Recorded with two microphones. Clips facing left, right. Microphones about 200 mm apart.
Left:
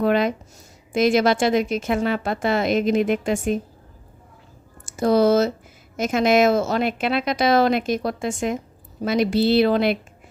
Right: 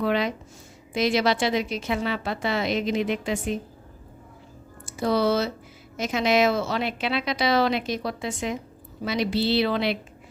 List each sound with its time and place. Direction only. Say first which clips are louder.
0.0 s a woman's voice: left 5 dB; 50° left (ahead or behind)
4.9 s a woman's voice: left 6 dB; 45° left (ahead or behind)